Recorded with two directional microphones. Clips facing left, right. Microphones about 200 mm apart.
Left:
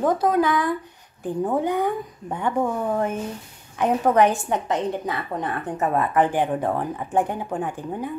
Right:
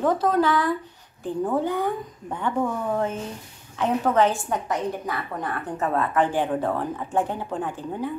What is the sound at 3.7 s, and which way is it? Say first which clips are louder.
A woman's voice: left 2 dB; 15° left (ahead or behind).